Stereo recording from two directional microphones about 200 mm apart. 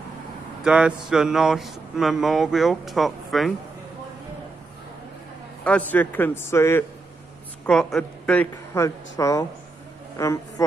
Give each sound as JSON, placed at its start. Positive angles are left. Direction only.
{"t": 0.7, "sound": "speech", "side_deg": -5}
{"t": 5.6, "sound": "a man's voice", "side_deg": 5}